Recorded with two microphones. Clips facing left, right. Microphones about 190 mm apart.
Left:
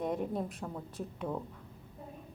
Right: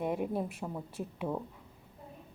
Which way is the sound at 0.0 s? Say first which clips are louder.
Right 1 dB; 5° right (ahead or behind).